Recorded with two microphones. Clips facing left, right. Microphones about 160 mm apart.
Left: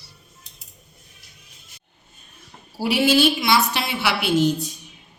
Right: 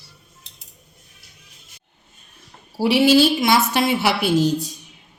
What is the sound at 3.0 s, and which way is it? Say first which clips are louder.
A woman's voice: right 3 dB; 40° right (ahead or behind).